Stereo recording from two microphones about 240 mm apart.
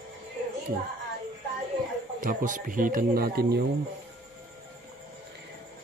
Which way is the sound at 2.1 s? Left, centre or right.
Right.